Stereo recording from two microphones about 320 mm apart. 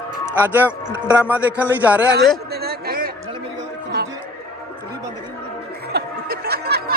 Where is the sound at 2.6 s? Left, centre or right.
Right.